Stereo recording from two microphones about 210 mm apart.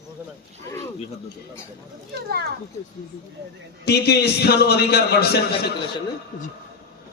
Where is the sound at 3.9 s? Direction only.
50° left (ahead or behind).